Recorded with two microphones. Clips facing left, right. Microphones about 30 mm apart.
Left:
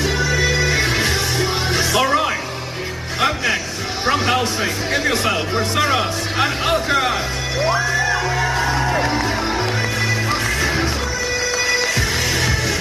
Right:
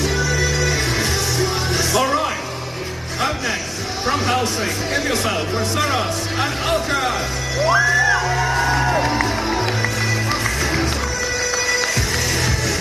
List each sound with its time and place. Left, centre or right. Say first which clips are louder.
0.0 s music: left 1 dB; centre
4.0 s a sound: left 2 dB; centre
4.9 s music: left 2 dB; centre
7.7 s music: right 5 dB; centre